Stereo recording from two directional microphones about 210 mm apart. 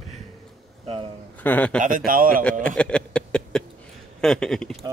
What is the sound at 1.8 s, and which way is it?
Speech, 40° right (ahead or behind).